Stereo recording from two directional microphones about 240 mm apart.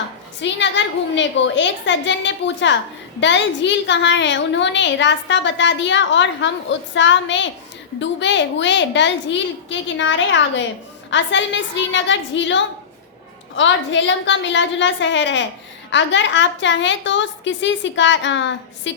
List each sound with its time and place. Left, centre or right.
0.4 s a woman's voice: left